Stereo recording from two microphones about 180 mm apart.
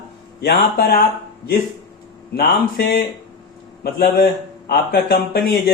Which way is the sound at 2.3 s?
60° left (ahead or behind).